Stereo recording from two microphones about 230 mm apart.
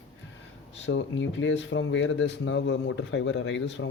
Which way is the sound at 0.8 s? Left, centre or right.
Left.